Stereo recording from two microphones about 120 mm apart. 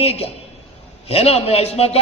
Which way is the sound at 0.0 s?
55° left (ahead or behind).